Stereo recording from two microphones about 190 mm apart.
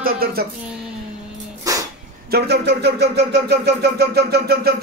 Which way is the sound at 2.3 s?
60° right (ahead or behind).